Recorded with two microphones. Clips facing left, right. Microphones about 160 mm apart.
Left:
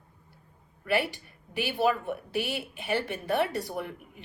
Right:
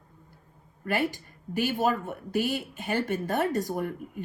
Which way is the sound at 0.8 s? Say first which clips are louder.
Even; 45° right (ahead or behind).